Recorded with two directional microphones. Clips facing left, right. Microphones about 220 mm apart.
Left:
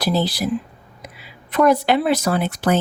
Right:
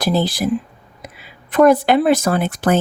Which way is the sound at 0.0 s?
50° right (ahead or behind).